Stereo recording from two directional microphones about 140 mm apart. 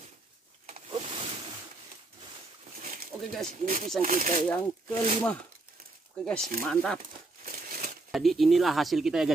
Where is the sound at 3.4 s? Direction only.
70° right (ahead or behind).